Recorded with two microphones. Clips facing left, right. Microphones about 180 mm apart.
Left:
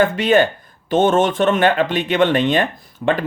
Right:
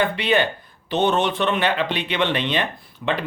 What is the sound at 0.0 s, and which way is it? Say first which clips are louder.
Speech: left 6 dB; 45° left (ahead or behind).